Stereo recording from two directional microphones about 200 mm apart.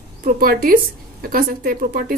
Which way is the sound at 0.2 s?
45° right (ahead or behind).